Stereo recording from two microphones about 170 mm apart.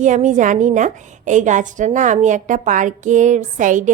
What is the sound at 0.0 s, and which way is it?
A woman's voice, 45° right (ahead or behind).